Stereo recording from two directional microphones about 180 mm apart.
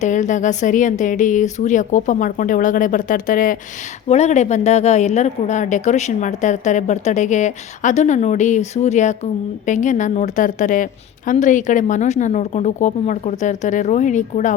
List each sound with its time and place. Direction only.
0.0 s a woman's voice: 40° left (ahead or behind)